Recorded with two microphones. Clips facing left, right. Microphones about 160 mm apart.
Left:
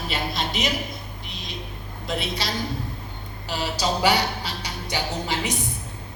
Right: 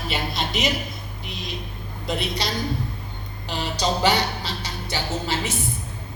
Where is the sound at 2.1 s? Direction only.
Centre (ahead or behind).